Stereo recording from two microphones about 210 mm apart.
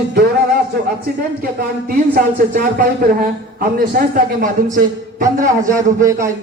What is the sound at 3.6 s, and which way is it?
A man's voice, 45° right (ahead or behind).